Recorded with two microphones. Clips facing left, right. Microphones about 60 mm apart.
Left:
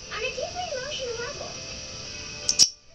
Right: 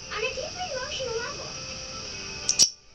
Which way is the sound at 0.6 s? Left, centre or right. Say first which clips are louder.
Left 1 dB; right.